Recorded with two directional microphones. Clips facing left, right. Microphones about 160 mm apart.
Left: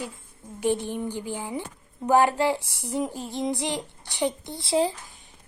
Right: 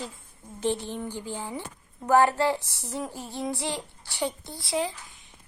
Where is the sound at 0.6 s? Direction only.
15° left (ahead or behind).